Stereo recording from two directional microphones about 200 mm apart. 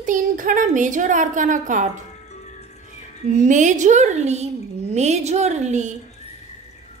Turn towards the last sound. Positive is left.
turn(degrees=-35)  # may be behind; listen again after turning